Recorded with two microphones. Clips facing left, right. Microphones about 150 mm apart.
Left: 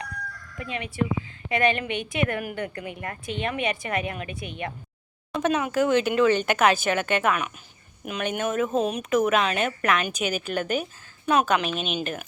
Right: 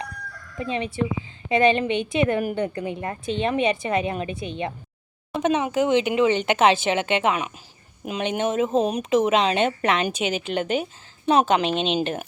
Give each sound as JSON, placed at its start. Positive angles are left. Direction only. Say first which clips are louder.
{"t": 0.6, "sound": "a woman's voice", "louder": "right 3 dB", "side_deg": -30}